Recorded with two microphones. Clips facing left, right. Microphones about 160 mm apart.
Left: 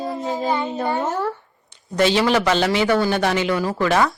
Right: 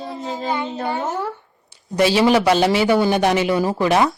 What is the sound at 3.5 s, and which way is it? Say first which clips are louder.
Speech: right 2 dB; 25° right (ahead or behind).